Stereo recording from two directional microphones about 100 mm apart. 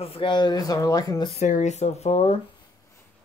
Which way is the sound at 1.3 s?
90° left.